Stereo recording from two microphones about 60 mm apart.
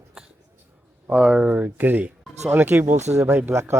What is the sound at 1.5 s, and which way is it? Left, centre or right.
Speech, right.